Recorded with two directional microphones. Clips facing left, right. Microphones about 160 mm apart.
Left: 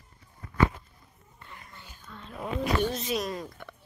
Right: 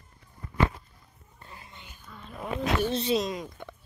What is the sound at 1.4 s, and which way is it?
Music, 35° right (ahead or behind).